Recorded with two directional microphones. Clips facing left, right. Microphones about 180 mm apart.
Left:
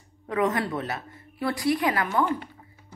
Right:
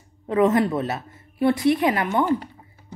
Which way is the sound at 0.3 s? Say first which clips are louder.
Right 7 dB; 25° right (ahead or behind).